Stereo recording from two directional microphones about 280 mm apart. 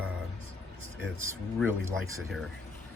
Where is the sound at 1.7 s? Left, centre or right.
Centre.